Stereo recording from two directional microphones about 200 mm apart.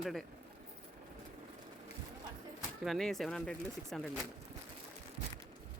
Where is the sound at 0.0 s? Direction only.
Centre (ahead or behind).